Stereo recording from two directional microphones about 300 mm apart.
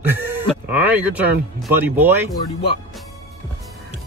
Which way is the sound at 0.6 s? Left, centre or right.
Centre.